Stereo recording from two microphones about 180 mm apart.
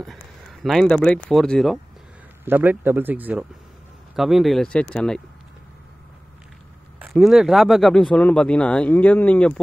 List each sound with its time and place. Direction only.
0.0 s speech: centre (ahead or behind)
2.4 s a man's voice: 10° right (ahead or behind)
7.1 s speech: centre (ahead or behind)